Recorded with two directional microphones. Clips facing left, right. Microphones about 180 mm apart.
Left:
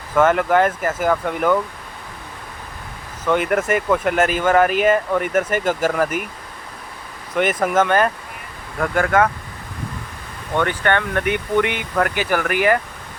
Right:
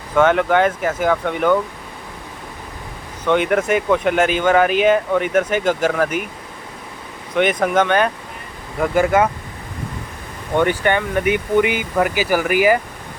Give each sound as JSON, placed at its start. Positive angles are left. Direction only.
{"t": 0.1, "sound": "speech", "side_deg": 5}
{"t": 3.2, "sound": "speech", "side_deg": 0}
{"t": 7.3, "sound": "speech", "side_deg": 5}
{"t": 8.8, "sound": "speech", "side_deg": -10}
{"t": 10.5, "sound": "speech", "side_deg": -10}